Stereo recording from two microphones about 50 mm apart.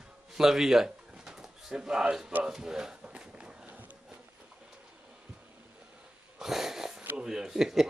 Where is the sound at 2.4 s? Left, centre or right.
Centre.